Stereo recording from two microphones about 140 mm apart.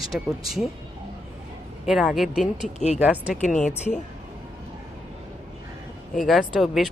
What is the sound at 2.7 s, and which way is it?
Speech, 50° left (ahead or behind).